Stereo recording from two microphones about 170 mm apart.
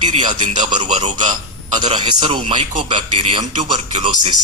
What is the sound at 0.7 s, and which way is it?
Speech, 40° right (ahead or behind).